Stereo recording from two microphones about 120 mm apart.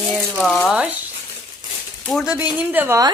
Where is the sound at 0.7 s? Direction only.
10° right (ahead or behind).